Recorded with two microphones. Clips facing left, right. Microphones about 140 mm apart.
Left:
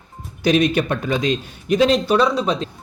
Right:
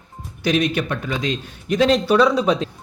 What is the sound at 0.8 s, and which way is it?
Speech, 40° left (ahead or behind).